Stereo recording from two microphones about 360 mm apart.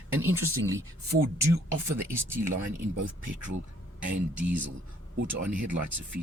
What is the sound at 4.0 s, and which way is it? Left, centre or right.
Speech, right.